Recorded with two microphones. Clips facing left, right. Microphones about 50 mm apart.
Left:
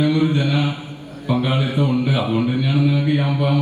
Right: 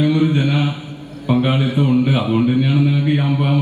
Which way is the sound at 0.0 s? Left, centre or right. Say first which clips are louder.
Right 2 dB; right.